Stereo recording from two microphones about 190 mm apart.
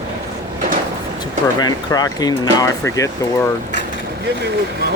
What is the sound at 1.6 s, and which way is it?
Speech, 20° left (ahead or behind).